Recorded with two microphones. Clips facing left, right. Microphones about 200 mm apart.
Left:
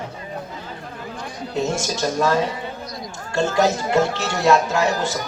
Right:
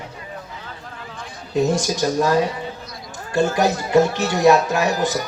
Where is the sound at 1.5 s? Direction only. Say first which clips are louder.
Right 4 dB; 15° right (ahead or behind).